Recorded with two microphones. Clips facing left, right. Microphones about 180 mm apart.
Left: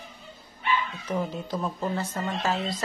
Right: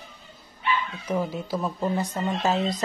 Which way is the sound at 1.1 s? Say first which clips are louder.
Right 3 dB; 10° right (ahead or behind).